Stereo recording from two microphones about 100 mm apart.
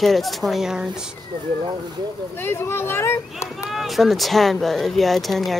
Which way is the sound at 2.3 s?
25° left (ahead or behind).